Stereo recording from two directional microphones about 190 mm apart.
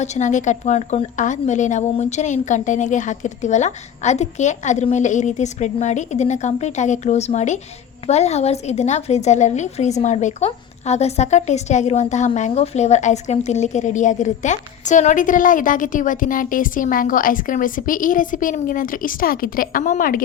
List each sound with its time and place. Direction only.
0.0 s a woman's voice: 40° left (ahead or behind)